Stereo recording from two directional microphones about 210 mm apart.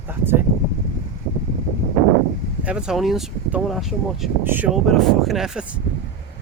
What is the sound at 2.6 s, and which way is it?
Speech, 5° right (ahead or behind).